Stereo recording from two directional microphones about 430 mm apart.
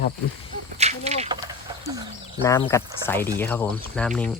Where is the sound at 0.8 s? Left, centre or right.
Centre.